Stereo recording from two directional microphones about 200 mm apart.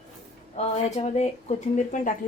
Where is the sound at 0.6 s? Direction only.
35° left (ahead or behind).